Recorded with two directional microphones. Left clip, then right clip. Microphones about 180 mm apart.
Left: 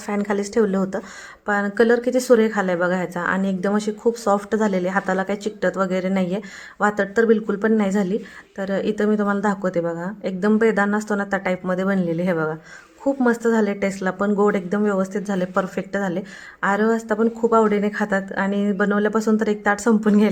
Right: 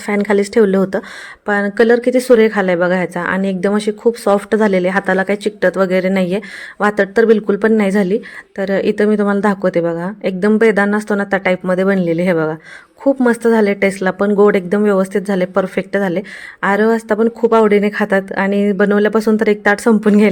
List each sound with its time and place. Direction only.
0.0 s speech: 20° right (ahead or behind)